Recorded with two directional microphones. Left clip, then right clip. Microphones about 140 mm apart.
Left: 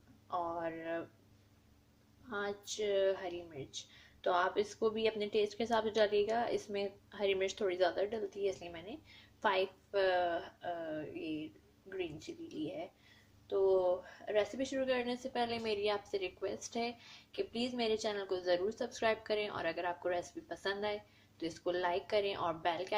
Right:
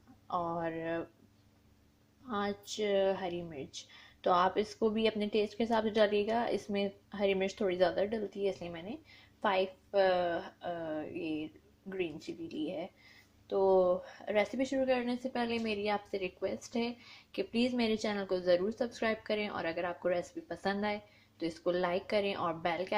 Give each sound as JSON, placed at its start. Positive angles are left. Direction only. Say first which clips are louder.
{"t": 0.3, "sound": "speech", "louder": "right 3 dB", "side_deg": -40}
{"t": 2.3, "sound": "a woman's voice", "louder": "right 3 dB", "side_deg": -40}